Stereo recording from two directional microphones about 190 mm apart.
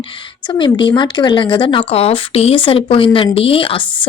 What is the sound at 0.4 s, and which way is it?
A woman's voice, 25° left (ahead or behind).